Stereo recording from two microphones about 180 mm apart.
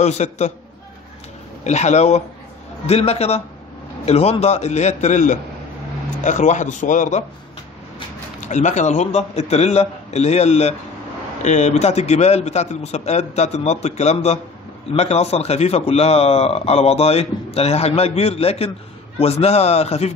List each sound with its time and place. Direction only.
0.0 s a man's voice: 40° left (ahead or behind)
1.6 s a man's voice: 40° left (ahead or behind)
8.5 s a man's voice: 40° left (ahead or behind)